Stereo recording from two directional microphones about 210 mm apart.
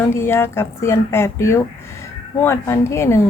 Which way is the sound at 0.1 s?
10° left (ahead or behind).